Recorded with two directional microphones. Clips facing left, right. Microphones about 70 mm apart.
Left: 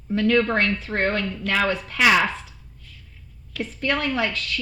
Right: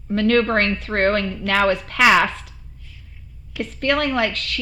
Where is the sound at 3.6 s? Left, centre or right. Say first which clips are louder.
Right 4 dB; right.